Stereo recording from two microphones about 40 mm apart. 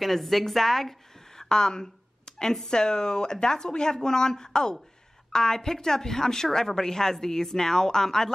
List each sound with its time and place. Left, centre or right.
0.0 s a woman's voice: centre